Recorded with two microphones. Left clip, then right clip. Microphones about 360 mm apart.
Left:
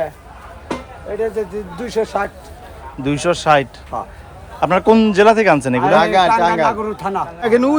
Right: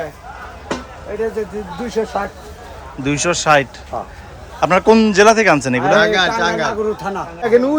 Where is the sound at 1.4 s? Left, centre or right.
Left.